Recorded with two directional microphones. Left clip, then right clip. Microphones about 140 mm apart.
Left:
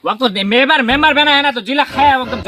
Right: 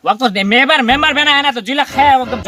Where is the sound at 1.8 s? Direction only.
Centre (ahead or behind).